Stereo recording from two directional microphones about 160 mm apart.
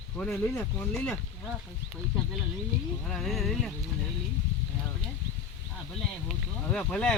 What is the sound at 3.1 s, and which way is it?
Speech, centre (ahead or behind).